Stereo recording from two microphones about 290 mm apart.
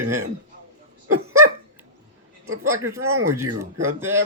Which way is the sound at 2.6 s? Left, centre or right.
Centre.